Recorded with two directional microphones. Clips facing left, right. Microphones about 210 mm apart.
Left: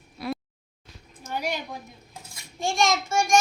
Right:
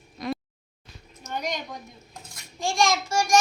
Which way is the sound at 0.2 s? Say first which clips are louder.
Right 1 dB; 5° left (ahead or behind).